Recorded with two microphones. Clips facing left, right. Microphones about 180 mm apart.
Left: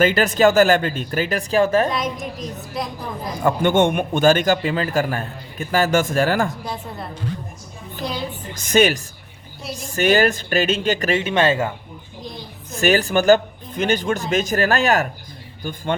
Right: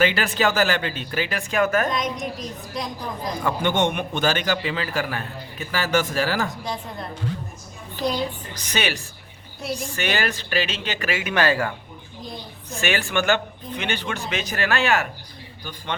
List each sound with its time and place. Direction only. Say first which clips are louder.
0.0 s a man's voice: left 6 dB; 45° left (ahead or behind)
1.9 s a woman's voice: left 1 dB; 5° left (ahead or behind)
3.4 s a man's voice: left 6 dB; 50° left (ahead or behind)
8.7 s a man's voice: left 10 dB; 45° left (ahead or behind)
11.2 s speech: left 3 dB; 25° left (ahead or behind)
12.7 s speech: left 6 dB; 40° left (ahead or behind)